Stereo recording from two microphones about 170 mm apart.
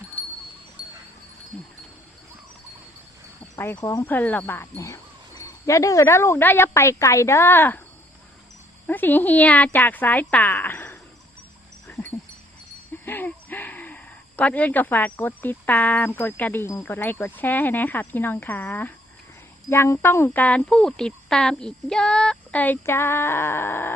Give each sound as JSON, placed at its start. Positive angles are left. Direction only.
{"t": 1.5, "sound": "speech", "side_deg": 5}
{"t": 3.5, "sound": "a sound", "side_deg": 15}
{"t": 3.8, "sound": "speech", "side_deg": 20}
{"t": 4.0, "sound": "speech", "side_deg": 10}
{"t": 8.9, "sound": "speech", "side_deg": 10}
{"t": 13.1, "sound": "speech", "side_deg": 10}